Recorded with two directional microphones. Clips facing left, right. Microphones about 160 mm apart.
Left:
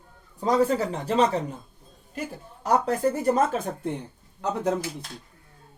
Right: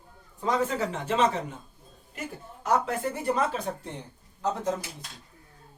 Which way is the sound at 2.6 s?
40° left (ahead or behind).